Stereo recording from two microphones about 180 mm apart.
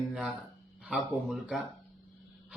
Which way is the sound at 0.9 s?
5° right (ahead or behind).